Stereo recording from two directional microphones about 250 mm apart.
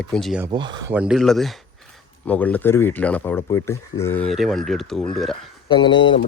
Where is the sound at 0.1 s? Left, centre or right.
Centre.